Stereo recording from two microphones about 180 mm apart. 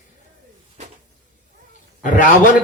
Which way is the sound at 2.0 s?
45° left (ahead or behind).